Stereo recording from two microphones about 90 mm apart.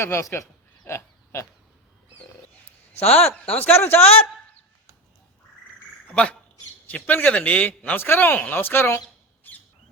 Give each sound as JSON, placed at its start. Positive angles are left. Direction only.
{"t": 0.0, "sound": "a man's voice", "side_deg": 30}
{"t": 0.9, "sound": "a sound", "side_deg": 30}
{"t": 3.1, "sound": "speech", "side_deg": 15}
{"t": 3.7, "sound": "a man's voice", "side_deg": 25}
{"t": 6.1, "sound": "a man's voice", "side_deg": 10}